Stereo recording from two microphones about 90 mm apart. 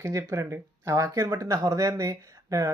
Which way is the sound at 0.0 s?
35° right (ahead or behind).